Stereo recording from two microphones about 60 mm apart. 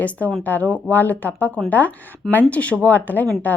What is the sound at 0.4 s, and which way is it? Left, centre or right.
A woman's voice, left.